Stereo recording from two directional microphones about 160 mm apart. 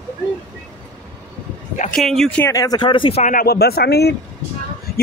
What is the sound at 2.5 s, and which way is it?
Speech, 20° left (ahead or behind).